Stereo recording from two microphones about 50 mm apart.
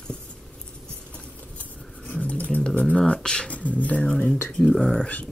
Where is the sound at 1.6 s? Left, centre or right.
Left.